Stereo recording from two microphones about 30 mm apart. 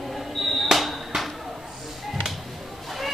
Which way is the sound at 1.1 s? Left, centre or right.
Centre.